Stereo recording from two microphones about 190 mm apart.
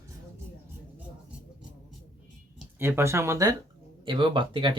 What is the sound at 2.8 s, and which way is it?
Speech, 10° right (ahead or behind).